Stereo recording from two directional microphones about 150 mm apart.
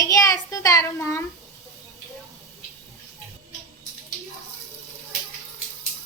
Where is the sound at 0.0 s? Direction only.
20° left (ahead or behind).